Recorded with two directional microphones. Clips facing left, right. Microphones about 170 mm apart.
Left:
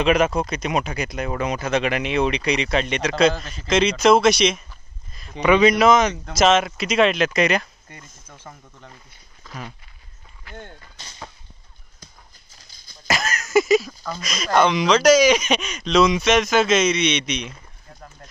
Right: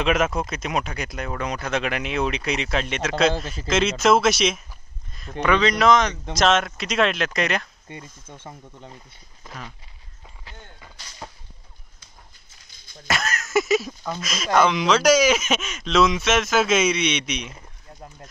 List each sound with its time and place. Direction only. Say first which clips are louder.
0.0 s speech: left 3 dB; centre (ahead or behind)
5.4 s speech: left 4 dB; 10° left (ahead or behind)
7.9 s speech: right 6 dB; 25° right (ahead or behind)
13.0 s speech: left 2 dB; centre (ahead or behind)